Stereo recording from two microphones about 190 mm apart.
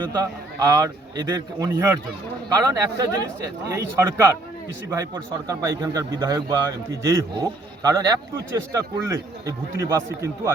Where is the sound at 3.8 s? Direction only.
15° right (ahead or behind).